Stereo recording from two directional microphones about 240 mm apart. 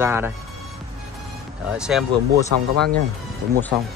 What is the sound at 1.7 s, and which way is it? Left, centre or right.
Speech, centre.